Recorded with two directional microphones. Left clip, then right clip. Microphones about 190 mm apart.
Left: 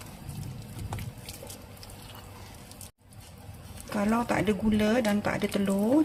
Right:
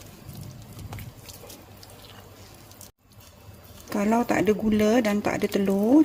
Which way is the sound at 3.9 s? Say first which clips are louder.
Right 4 dB; 35° right (ahead or behind).